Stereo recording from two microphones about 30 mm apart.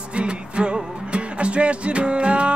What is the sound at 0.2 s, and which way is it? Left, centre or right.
Music, right.